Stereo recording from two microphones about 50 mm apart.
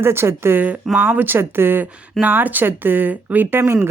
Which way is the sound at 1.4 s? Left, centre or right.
Right.